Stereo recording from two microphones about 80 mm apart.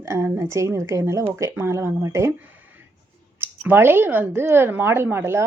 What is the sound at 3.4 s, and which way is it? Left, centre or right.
Speech, right.